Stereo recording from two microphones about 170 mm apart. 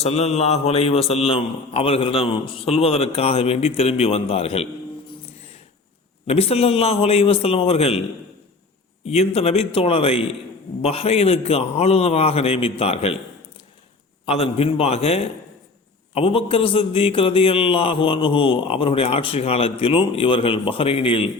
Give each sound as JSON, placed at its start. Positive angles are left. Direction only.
{"t": 0.0, "sound": "a man's voice", "side_deg": 40}
{"t": 6.2, "sound": "a man's voice", "side_deg": 35}
{"t": 9.0, "sound": "a man's voice", "side_deg": 40}
{"t": 14.3, "sound": "a man's voice", "side_deg": 35}